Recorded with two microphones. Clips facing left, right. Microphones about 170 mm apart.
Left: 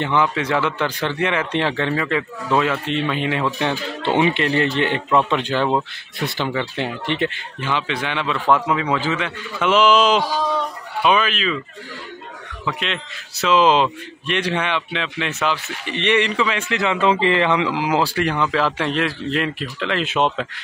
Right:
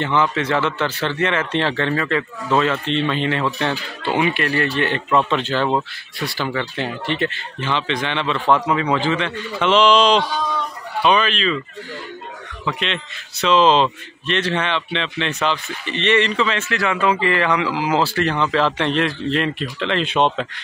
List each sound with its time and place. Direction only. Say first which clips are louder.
0.0 s speech: even; 15° left (ahead or behind)
4.0 s a man's voice: left 2 dB; 25° left (ahead or behind); by 11.6 s 5° left (ahead or behind)
12.6 s a man's voice: right 1 dB; centre (ahead or behind)